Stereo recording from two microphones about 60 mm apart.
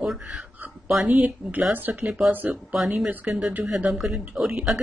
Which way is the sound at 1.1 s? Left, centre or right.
Right.